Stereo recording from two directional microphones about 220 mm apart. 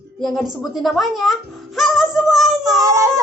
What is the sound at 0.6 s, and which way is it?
Speech, centre (ahead or behind).